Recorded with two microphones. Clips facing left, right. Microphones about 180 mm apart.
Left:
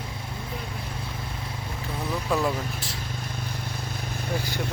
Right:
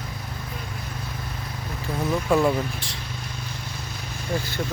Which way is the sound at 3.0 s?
50° left (ahead or behind).